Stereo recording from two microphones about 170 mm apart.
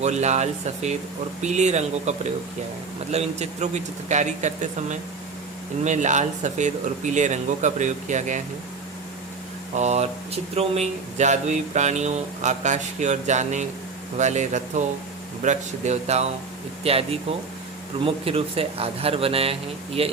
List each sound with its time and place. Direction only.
0.0 s a man's voice: 40° right (ahead or behind)
9.7 s a man's voice: 40° right (ahead or behind)